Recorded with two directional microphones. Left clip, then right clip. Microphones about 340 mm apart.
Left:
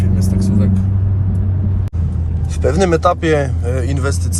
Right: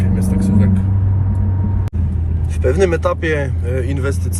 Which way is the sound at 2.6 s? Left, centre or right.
Centre.